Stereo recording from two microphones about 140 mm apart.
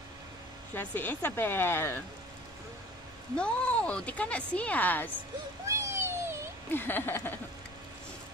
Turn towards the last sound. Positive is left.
turn(degrees=15)  # may be behind; listen again after turning